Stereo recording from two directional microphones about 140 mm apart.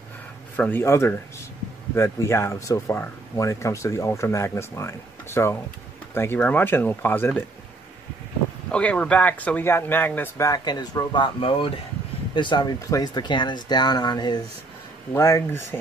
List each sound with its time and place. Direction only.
0.6 s speech: 15° left (ahead or behind)
8.7 s speech: 10° left (ahead or behind)